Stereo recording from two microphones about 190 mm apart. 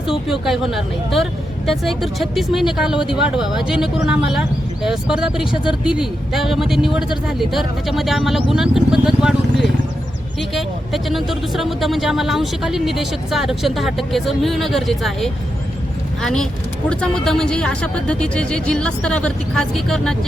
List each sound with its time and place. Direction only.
0.3 s speech: centre (ahead or behind)